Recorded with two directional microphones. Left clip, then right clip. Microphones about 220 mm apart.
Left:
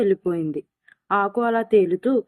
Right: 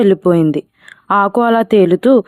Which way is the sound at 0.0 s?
50° right (ahead or behind).